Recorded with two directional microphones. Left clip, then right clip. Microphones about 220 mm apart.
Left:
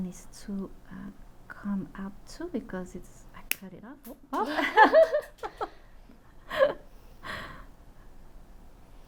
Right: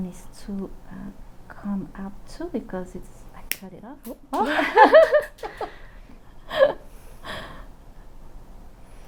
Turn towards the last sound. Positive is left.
turn(degrees=10)  # may be behind; listen again after turning